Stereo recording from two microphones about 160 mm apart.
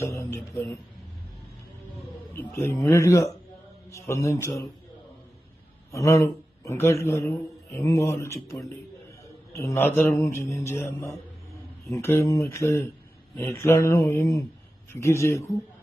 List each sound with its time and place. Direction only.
0.0 s speech: 15° left (ahead or behind)
2.3 s a man's voice: 15° left (ahead or behind)
5.9 s a man's voice: 20° left (ahead or behind)
11.9 s a man's voice: 15° left (ahead or behind)